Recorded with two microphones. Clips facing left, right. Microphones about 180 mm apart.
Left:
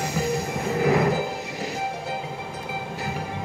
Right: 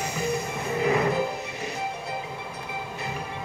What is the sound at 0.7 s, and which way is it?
Music, 75° left (ahead or behind).